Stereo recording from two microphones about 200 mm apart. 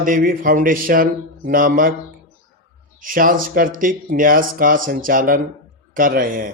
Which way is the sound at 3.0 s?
45° right (ahead or behind).